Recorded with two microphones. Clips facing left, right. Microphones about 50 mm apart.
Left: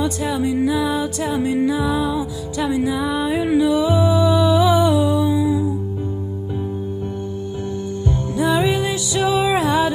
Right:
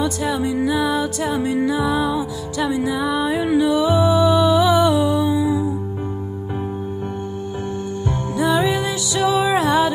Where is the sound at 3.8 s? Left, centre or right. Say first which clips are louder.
Right 1 dB; right.